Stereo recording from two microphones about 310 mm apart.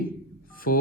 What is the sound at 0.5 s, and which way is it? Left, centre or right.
Telephone dialing, left.